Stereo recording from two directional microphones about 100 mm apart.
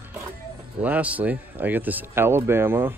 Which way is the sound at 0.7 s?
15° right (ahead or behind).